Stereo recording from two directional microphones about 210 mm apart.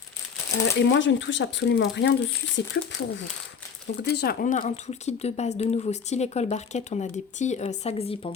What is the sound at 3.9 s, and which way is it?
Speech, 50° left (ahead or behind).